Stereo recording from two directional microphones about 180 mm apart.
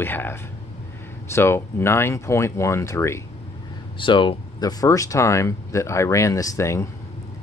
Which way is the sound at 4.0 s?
25° left (ahead or behind).